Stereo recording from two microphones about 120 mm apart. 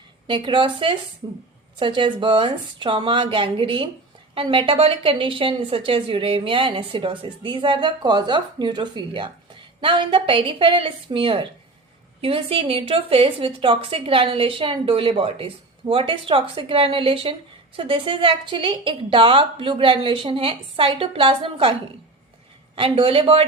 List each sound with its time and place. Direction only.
0.3 s a woman's voice: 45° right (ahead or behind)